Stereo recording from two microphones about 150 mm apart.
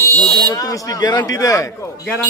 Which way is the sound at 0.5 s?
25° left (ahead or behind).